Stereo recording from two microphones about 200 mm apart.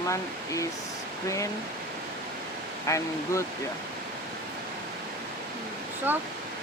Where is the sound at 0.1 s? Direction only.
15° left (ahead or behind).